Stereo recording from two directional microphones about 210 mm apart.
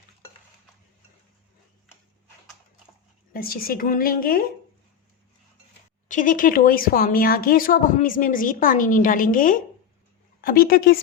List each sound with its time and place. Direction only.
3.3 s a woman's voice: 45° left (ahead or behind)
6.1 s a woman's voice: 40° left (ahead or behind)